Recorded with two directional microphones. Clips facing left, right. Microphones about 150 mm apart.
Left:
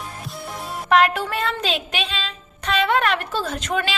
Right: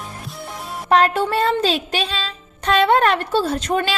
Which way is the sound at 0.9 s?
35° right (ahead or behind).